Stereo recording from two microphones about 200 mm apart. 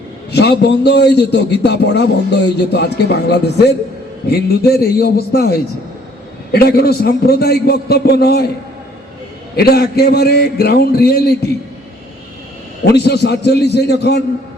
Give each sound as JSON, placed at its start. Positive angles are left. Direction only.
{"t": 0.3, "sound": "a man's voice", "side_deg": 60}
{"t": 9.6, "sound": "a man's voice", "side_deg": 50}
{"t": 12.8, "sound": "a man's voice", "side_deg": 55}